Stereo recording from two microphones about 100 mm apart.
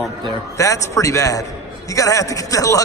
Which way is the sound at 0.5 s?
35° left (ahead or behind).